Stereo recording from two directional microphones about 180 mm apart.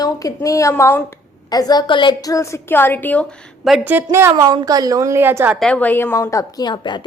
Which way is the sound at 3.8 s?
10° right (ahead or behind).